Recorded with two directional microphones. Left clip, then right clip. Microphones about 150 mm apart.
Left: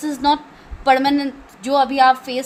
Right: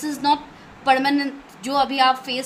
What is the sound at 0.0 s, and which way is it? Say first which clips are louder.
Speech: left 2 dB; 45° left (ahead or behind).